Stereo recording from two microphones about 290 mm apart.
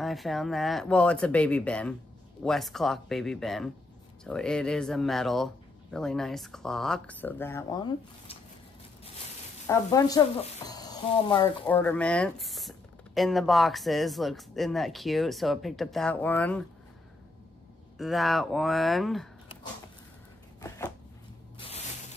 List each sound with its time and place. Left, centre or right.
0.0 s speech: centre
9.7 s speech: centre
17.9 s speech: centre
20.6 s a sound: centre
21.5 s spray: centre